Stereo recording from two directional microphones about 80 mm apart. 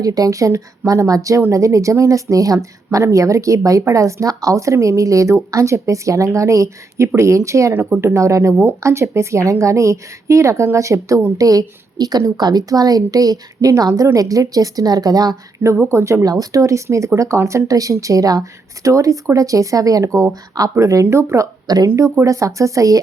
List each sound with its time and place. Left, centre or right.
0.0 s a woman's voice: right
15.6 s speech: right
16.2 s a woman's voice: right